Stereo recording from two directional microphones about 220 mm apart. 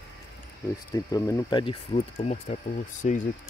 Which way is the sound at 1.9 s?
30° left (ahead or behind).